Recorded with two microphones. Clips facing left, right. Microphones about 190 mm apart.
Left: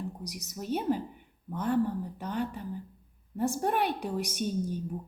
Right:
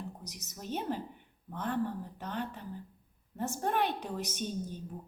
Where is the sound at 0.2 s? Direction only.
10° left (ahead or behind).